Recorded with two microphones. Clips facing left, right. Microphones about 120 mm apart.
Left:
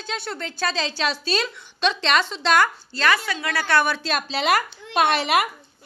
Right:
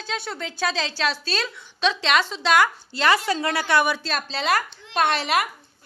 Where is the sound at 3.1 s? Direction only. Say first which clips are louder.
Right 3 dB; 35° right (ahead or behind); by 4.0 s 15° right (ahead or behind).